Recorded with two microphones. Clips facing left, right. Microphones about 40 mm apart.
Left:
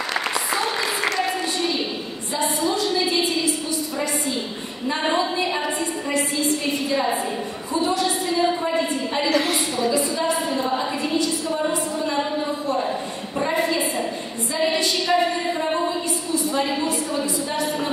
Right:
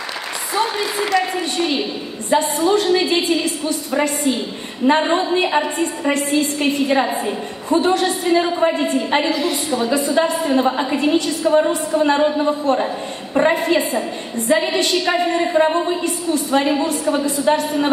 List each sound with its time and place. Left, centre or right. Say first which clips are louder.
2.3 s a woman's voice: right 7 dB; right
9.3 s a woman's voice: right 1 dB; left
9.7 s a woman's voice: right 3 dB; right